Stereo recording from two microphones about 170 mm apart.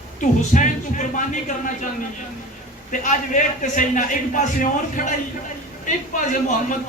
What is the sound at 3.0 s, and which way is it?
A man's voice, 50° left (ahead or behind).